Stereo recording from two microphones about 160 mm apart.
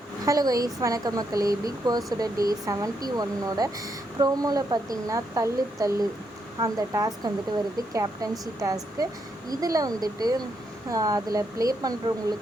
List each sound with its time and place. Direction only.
0.3 s speech: 20° right (ahead or behind)